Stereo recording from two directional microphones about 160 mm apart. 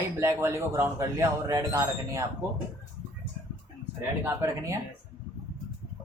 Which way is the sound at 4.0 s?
15° right (ahead or behind).